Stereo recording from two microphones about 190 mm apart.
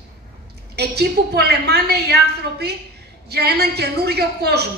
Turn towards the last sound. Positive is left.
turn(degrees=-60)  # may be behind; listen again after turning